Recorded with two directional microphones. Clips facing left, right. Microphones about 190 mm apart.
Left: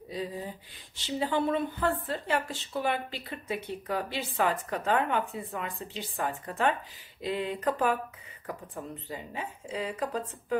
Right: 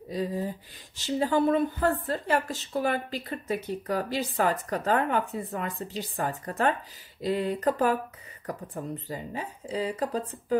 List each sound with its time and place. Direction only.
0.1 s a woman's voice: 45° right (ahead or behind)